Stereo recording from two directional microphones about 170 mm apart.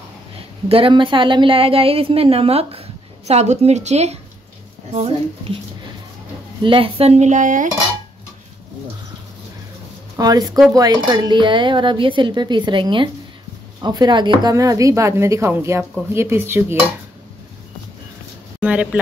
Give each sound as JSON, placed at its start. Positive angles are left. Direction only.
{"t": 0.7, "sound": "a woman's voice", "side_deg": -30}
{"t": 6.6, "sound": "a woman's voice", "side_deg": -30}
{"t": 10.1, "sound": "a woman's voice", "side_deg": -20}
{"t": 18.6, "sound": "speech", "side_deg": -10}